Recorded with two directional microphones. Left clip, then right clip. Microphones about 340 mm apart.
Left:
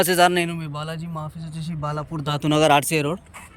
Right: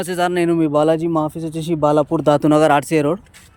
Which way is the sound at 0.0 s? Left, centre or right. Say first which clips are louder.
Left 1 dB; centre.